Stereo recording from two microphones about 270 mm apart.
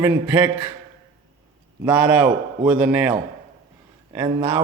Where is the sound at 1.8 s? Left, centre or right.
Centre.